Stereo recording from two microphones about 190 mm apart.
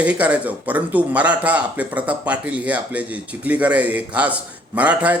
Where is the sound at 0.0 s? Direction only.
5° right (ahead or behind).